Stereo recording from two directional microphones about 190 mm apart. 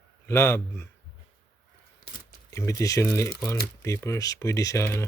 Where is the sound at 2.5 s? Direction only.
15° left (ahead or behind).